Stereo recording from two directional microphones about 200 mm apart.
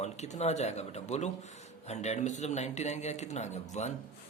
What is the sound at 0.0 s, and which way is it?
Speech, 35° left (ahead or behind).